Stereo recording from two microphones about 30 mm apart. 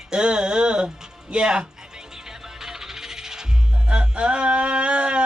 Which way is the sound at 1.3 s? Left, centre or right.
Right.